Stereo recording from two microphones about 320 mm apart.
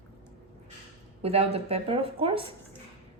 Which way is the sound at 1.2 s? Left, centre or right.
Centre.